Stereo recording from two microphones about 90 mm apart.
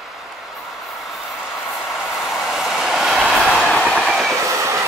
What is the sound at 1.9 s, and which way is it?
Vehicle, centre (ahead or behind).